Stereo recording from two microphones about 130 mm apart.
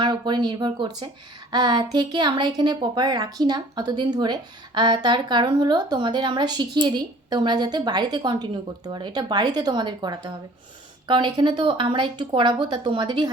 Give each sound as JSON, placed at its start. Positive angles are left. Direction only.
{"t": 0.0, "sound": "a woman's voice", "side_deg": -35}